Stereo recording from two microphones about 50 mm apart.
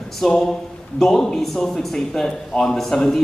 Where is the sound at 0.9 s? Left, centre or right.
Centre.